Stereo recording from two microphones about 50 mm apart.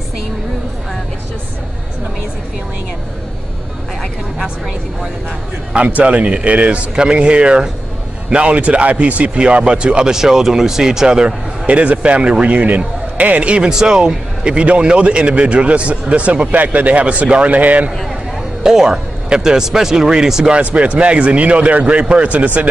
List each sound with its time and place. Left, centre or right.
5.7 s a man's voice: right
11.6 s a man's voice: right
13.7 s a man's voice: centre; by 17.9 s right
18.6 s speech: centre
20.7 s a man's voice: right